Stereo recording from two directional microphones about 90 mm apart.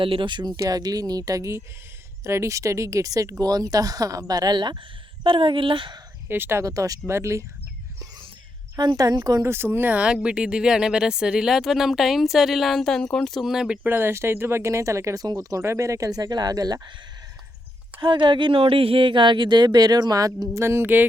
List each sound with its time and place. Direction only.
0.0 s speech: 70° right (ahead or behind); by 4.5 s 45° right (ahead or behind)
4.5 s speech: 60° right (ahead or behind)
5.2 s speech: 70° right (ahead or behind)
6.2 s speech: 25° right (ahead or behind)
8.8 s speech: 50° right (ahead or behind)
9.4 s speech: 25° right (ahead or behind); by 13.7 s 5° right (ahead or behind)
13.8 s speech: 25° right (ahead or behind); by 16.9 s 50° right (ahead or behind)
18.0 s speech: 60° right (ahead or behind); by 21.0 s 25° right (ahead or behind)